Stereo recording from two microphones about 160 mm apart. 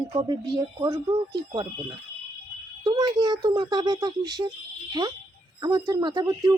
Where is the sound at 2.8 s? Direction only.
25° right (ahead or behind).